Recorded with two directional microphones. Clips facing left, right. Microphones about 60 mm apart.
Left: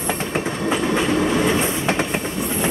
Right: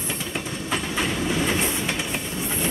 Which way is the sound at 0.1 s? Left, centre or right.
Left.